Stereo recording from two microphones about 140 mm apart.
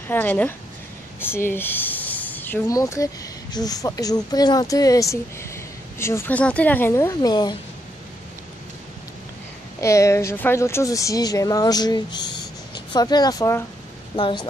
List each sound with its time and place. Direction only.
0.1 s a woman's voice: 10° left (ahead or behind)
1.2 s a sound: 15° left (ahead or behind)
2.7 s speech: 25° left (ahead or behind)
9.8 s speech: 20° left (ahead or behind)
14.1 s speech: 35° left (ahead or behind)